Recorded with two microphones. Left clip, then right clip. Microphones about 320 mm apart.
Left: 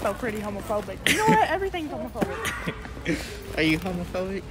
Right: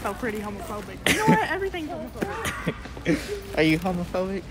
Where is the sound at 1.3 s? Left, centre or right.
Centre.